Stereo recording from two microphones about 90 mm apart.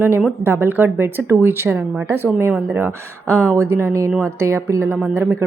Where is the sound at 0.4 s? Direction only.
25° right (ahead or behind).